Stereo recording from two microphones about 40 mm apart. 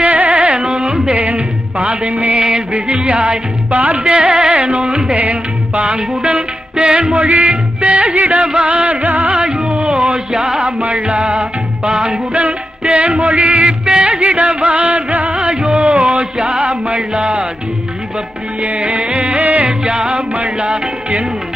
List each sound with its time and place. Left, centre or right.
0.0 s carnatic music: right
1.1 s music: right
4.0 s carnatic music: right
4.5 s music: right
5.2 s music: right
6.7 s music: right
9.3 s music: right
10.3 s carnatic music: centre
10.8 s music: right
11.9 s carnatic music: right
12.3 s music: right
18.6 s music: right
20.0 s carnatic music: right
20.3 s music: right